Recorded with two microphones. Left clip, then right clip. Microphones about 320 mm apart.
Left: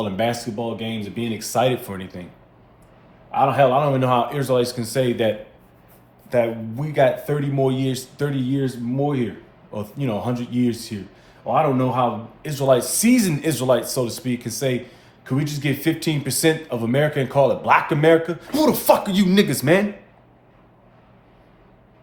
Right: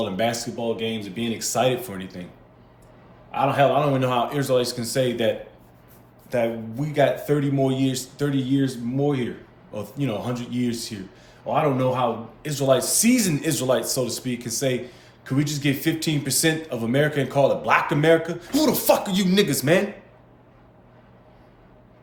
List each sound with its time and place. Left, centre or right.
0.0 s speech: centre
3.3 s speech: centre
6.3 s speech: centre